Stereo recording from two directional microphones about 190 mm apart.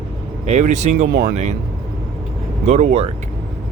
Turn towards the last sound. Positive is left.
turn(degrees=-35)  # may be behind; listen again after turning